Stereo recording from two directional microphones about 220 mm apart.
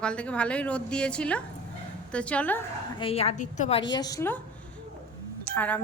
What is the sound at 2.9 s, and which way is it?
Speech, 25° left (ahead or behind).